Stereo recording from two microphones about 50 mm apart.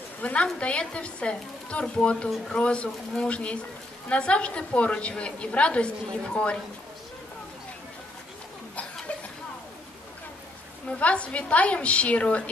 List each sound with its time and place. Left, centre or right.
0.2 s a woman's voice: left
10.9 s a woman's voice: left